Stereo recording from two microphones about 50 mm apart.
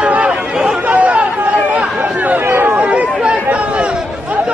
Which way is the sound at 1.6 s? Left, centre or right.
Right.